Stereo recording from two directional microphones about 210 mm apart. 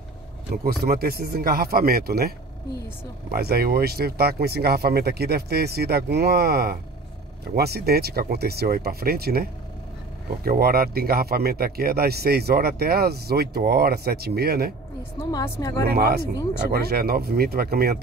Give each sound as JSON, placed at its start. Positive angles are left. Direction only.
{"t": 0.7, "sound": "speech", "side_deg": -45}
{"t": 15.1, "sound": "speech", "side_deg": 10}
{"t": 15.8, "sound": "speech", "side_deg": -45}